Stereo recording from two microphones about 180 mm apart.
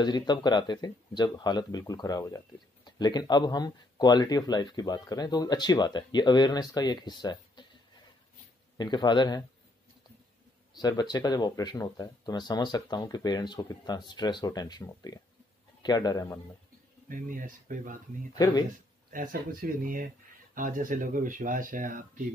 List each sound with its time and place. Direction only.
0.0 s speech: 25° left (ahead or behind)
8.7 s speech: 25° left (ahead or behind)
10.8 s speech: 20° left (ahead or behind)
17.1 s speech: 50° right (ahead or behind)